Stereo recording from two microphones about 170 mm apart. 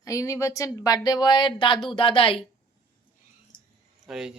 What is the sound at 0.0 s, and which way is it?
Speech, 20° left (ahead or behind).